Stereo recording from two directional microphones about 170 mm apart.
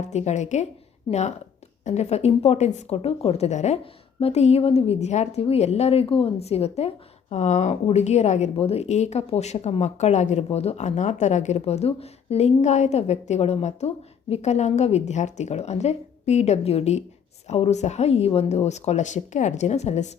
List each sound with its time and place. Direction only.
0.0 s a woman's voice: 40° left (ahead or behind)
1.8 s a woman's voice: 40° left (ahead or behind)